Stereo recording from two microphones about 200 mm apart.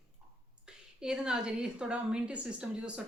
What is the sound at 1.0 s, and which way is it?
A woman's voice, 5° right (ahead or behind).